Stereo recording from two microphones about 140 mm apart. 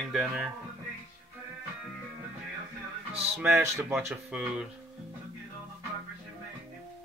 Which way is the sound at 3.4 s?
10° right (ahead or behind).